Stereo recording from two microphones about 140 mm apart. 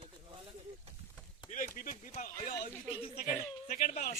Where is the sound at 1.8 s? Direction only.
75° left (ahead or behind).